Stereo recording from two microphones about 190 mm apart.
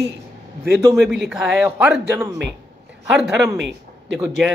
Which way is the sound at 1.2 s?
5° right (ahead or behind).